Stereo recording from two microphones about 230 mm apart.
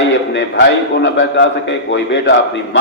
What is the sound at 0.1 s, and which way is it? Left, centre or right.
A man's voice, left.